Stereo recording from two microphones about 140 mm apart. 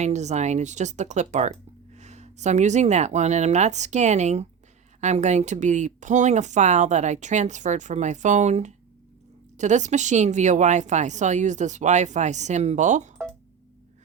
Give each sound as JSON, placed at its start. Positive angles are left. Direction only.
{"t": 0.0, "sound": "speech", "side_deg": -55}